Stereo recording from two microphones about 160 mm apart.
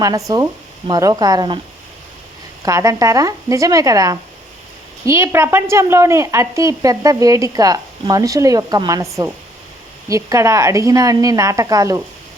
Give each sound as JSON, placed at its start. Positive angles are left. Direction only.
{"t": 0.0, "sound": "a woman's voice", "side_deg": -20}
{"t": 2.6, "sound": "a woman's voice", "side_deg": -20}
{"t": 10.1, "sound": "a woman's voice", "side_deg": -20}